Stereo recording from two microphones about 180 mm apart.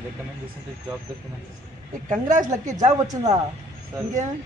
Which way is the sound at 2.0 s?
45° right (ahead or behind).